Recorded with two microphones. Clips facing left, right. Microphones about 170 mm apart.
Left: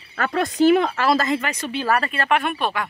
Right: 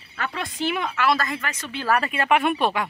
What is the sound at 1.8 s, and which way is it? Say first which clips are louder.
Speech: even; 10° right (ahead or behind).